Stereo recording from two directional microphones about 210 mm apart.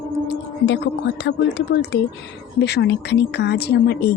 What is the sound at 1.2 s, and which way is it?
A woman's voice, 55° left (ahead or behind).